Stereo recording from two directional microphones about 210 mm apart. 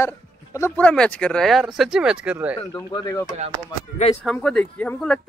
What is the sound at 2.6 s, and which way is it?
Speech, 15° left (ahead or behind).